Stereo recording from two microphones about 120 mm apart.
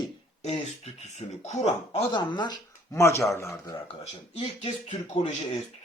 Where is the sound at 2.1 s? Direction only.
40° left (ahead or behind).